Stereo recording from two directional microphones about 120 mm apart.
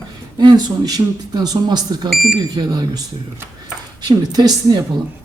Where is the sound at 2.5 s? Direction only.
35° right (ahead or behind).